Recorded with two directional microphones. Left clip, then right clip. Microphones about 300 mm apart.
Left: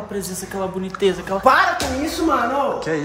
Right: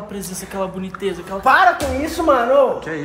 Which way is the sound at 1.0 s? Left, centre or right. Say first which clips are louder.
Left 5 dB; left.